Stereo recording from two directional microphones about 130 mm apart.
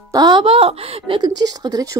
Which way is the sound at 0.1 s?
35° right (ahead or behind).